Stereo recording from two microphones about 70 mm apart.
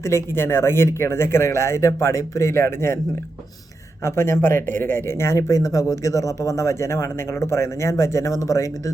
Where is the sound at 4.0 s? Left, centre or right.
Left.